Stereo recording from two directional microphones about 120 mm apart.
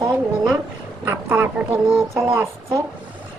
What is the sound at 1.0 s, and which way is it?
Speech, 20° right (ahead or behind).